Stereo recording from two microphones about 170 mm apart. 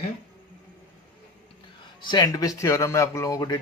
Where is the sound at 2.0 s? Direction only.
25° left (ahead or behind).